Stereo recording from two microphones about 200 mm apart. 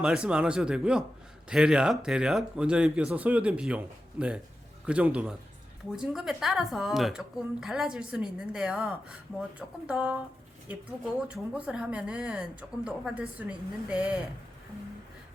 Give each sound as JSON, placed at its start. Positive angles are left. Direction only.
{"t": 0.0, "sound": "a woman's voice", "side_deg": -5}
{"t": 11.3, "sound": "a woman's voice", "side_deg": -5}